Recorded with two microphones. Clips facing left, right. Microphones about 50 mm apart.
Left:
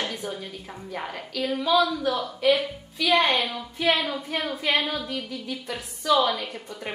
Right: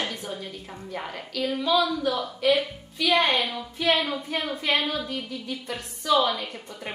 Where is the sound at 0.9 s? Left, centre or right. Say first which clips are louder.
Left 1 dB; centre.